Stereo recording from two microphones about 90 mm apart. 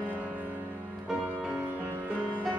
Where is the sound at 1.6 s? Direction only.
20° right (ahead or behind).